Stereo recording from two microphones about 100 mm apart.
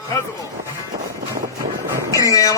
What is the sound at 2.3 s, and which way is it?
Speech, 35° left (ahead or behind).